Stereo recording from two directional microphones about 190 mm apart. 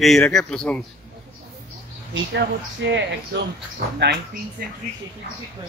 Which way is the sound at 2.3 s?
65° right (ahead or behind).